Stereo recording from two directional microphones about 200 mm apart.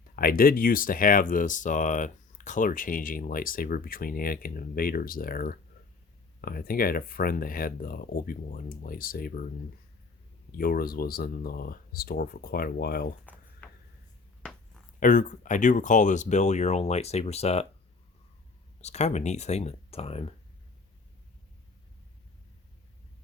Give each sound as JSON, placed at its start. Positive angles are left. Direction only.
{"t": 0.2, "sound": "speech", "side_deg": 45}
{"t": 10.6, "sound": "speech", "side_deg": 50}
{"t": 13.2, "sound": "a sound", "side_deg": 10}
{"t": 15.0, "sound": "speech", "side_deg": 40}
{"t": 18.8, "sound": "speech", "side_deg": 35}